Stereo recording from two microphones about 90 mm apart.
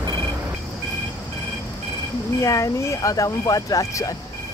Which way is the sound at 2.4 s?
35° left (ahead or behind).